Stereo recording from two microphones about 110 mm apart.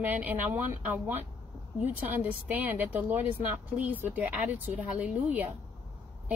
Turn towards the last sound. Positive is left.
turn(degrees=-15)  # may be behind; listen again after turning